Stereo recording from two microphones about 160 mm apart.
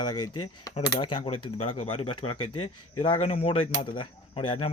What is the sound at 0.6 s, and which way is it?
A man's voice, 25° left (ahead or behind).